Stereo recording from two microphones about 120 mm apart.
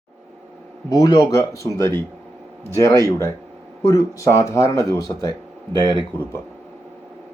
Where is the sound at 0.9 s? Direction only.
35° left (ahead or behind).